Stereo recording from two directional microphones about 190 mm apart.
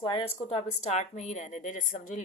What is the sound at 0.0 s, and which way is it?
Speech, 30° left (ahead or behind).